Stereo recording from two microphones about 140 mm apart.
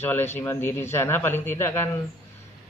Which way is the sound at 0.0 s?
15° left (ahead or behind).